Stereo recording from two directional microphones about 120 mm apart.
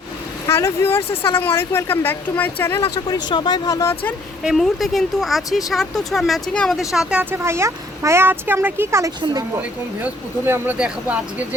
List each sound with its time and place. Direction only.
0.4 s speech: 20° left (ahead or behind)
1.1 s speech: 50° left (ahead or behind)
1.4 s speech: 20° left (ahead or behind)
3.1 s speech: 35° left (ahead or behind)
4.4 s speech: centre (ahead or behind)